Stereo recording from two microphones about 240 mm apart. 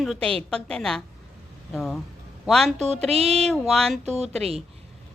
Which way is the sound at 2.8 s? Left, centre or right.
Right.